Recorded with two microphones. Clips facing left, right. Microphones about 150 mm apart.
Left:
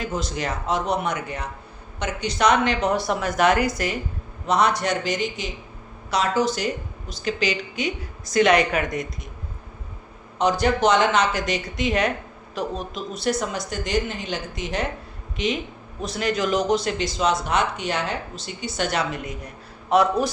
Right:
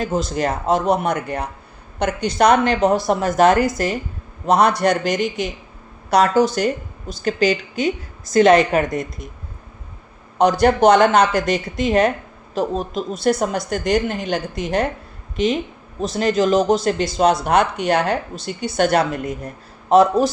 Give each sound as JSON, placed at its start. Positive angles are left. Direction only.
{"t": 0.0, "sound": "a woman's voice", "side_deg": -45}
{"t": 10.3, "sound": "a woman's voice", "side_deg": -55}
{"t": 16.1, "sound": "speech", "side_deg": -40}